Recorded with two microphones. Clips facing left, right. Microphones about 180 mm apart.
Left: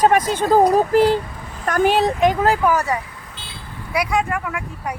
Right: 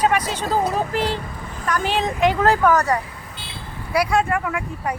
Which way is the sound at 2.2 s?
10° left (ahead or behind).